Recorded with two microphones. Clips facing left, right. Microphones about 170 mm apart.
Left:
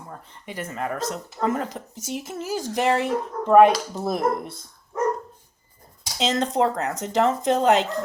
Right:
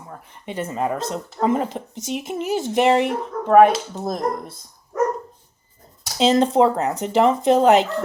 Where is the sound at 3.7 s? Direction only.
10° left (ahead or behind).